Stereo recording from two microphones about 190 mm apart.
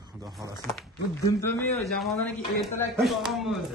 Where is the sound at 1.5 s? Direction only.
10° left (ahead or behind).